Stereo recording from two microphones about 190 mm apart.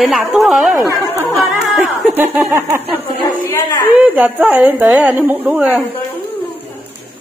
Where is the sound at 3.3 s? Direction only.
15° left (ahead or behind).